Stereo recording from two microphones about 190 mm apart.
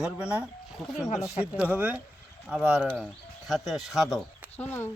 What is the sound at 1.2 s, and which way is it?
Speech, 15° left (ahead or behind).